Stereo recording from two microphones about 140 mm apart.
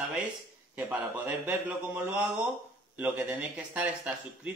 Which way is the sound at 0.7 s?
15° right (ahead or behind).